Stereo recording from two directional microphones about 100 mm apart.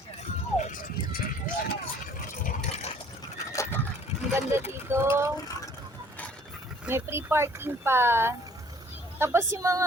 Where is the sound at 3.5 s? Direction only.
30° left (ahead or behind).